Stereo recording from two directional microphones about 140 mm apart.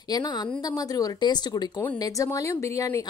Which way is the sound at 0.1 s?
30° left (ahead or behind).